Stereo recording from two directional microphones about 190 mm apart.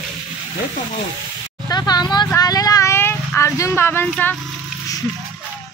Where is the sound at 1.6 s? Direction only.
20° left (ahead or behind).